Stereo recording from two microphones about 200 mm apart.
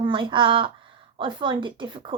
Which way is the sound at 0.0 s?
25° right (ahead or behind).